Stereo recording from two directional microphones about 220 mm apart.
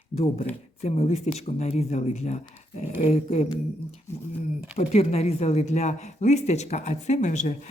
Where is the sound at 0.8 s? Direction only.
30° left (ahead or behind).